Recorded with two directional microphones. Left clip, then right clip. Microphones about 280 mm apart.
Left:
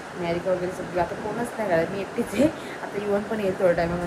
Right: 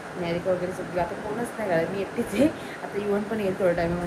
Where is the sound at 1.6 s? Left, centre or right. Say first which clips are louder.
Left 1 dB; centre.